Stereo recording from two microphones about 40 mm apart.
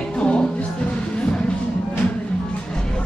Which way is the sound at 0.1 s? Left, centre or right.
Left.